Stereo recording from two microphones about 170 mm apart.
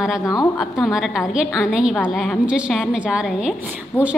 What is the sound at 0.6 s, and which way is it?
A woman's voice, centre (ahead or behind).